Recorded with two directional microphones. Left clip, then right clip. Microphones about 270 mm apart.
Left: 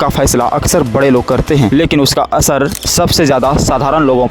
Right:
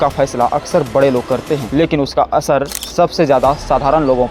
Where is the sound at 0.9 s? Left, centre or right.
Left.